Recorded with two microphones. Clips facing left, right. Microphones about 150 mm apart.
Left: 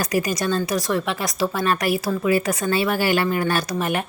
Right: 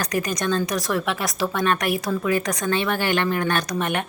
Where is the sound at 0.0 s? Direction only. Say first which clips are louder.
Left 2 dB; 10° left (ahead or behind).